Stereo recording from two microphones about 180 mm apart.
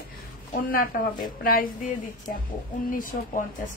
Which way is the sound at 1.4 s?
50° left (ahead or behind).